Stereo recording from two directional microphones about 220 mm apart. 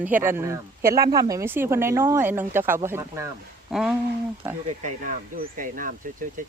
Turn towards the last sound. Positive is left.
turn(degrees=-35)  # may be behind; listen again after turning